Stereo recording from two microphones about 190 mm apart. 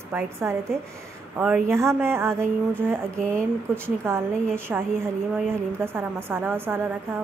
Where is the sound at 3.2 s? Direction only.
5° left (ahead or behind).